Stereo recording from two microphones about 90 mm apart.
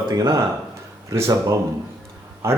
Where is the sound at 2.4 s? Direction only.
30° right (ahead or behind).